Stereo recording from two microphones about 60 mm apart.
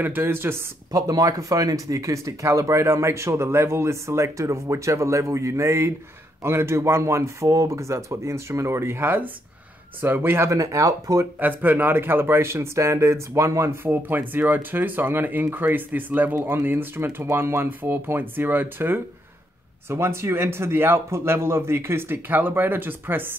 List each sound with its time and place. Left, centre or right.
0.0 s speech: right
0.9 s a man's voice: right
10.5 s speech: right
11.3 s a man's voice: right
13.8 s speech: right
19.9 s a man's voice: right